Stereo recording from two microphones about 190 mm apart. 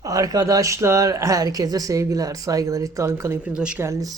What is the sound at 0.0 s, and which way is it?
Speech, 20° right (ahead or behind).